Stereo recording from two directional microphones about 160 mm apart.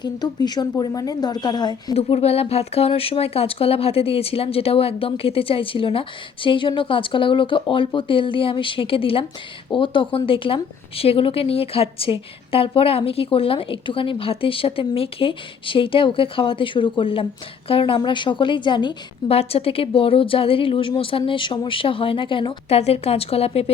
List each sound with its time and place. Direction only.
0.0 s a woman's voice: 25° left (ahead or behind)
1.9 s a woman's voice: 40° left (ahead or behind)